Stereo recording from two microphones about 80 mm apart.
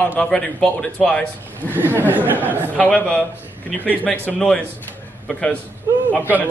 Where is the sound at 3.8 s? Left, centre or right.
Centre.